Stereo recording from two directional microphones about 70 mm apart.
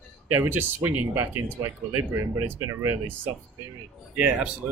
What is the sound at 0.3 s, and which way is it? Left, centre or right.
Speech, right.